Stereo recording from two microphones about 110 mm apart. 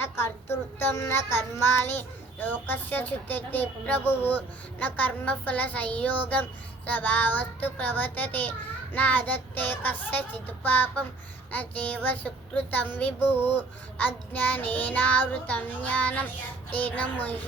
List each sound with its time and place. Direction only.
0.0 s child singing: 20° left (ahead or behind)
1.8 s a child's voice: 20° left (ahead or behind)